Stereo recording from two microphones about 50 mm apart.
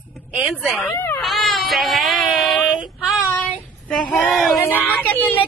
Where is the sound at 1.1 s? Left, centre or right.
Centre.